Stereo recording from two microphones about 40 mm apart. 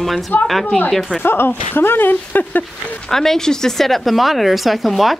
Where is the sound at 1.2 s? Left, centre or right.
Left.